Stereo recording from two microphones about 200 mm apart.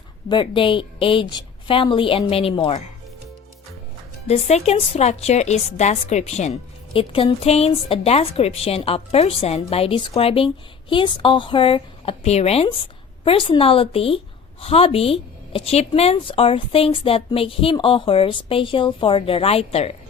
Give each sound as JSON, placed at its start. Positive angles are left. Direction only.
{"t": 0.3, "sound": "a woman's voice", "side_deg": 25}
{"t": 4.3, "sound": "a woman's voice", "side_deg": 30}